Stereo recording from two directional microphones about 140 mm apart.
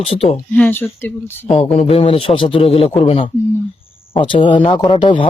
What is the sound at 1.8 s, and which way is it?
A man's voice, 45° left (ahead or behind).